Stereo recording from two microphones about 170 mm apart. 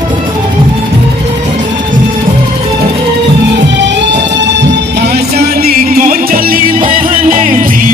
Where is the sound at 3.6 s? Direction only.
90° right; by 7.8 s 55° right (ahead or behind).